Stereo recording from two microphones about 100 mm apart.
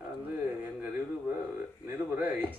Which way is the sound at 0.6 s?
20° right (ahead or behind).